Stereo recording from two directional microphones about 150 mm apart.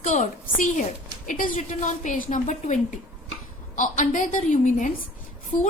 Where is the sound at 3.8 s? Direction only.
60° left (ahead or behind).